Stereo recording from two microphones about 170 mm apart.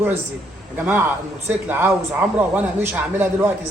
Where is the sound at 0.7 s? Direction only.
15° right (ahead or behind).